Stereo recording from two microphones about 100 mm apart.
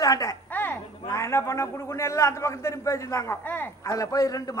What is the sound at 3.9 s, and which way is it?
Speech, 35° left (ahead or behind).